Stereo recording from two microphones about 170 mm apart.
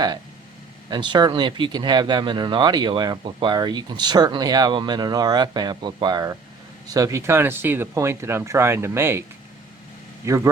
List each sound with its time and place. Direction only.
0.9 s speech: 25° right (ahead or behind)
10.2 s speech: 15° right (ahead or behind)